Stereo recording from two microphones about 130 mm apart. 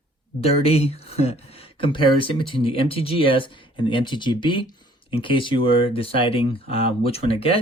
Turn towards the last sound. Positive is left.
turn(degrees=45)  # may be behind; listen again after turning